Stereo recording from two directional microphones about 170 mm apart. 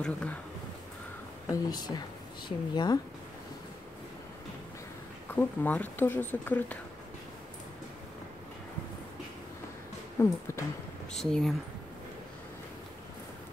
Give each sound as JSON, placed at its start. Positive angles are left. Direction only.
{"t": 0.0, "sound": "speech", "side_deg": 5}
{"t": 1.5, "sound": "speech", "side_deg": 25}
{"t": 5.3, "sound": "speech", "side_deg": 10}
{"t": 10.2, "sound": "a sound", "side_deg": 15}
{"t": 11.1, "sound": "speech", "side_deg": 5}